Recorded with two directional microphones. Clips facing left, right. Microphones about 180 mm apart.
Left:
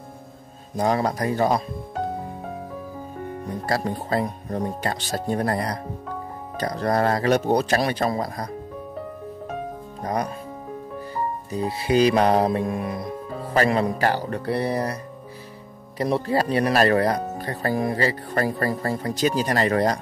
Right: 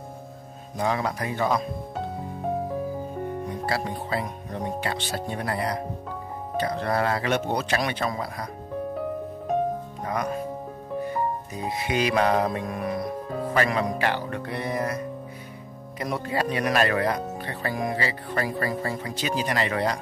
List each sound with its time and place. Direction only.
0.7 s speech: 40° left (ahead or behind)
3.6 s speech: 40° left (ahead or behind)
10.0 s speech: 35° left (ahead or behind)
11.5 s speech: 35° left (ahead or behind)